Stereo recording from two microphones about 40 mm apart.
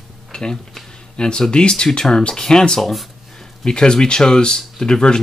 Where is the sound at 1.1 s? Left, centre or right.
Left.